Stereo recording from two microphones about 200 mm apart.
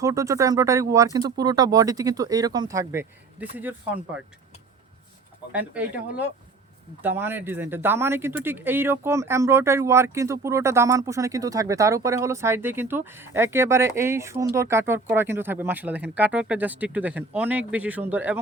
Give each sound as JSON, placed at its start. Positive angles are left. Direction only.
{"t": 0.0, "sound": "speech", "side_deg": -15}
{"t": 5.5, "sound": "speech", "side_deg": -5}